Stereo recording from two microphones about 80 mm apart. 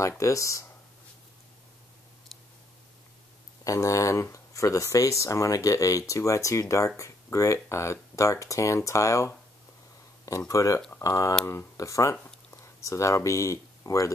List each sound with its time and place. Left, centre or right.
0.2 s speech: left
3.6 s speech: left
10.5 s speech: left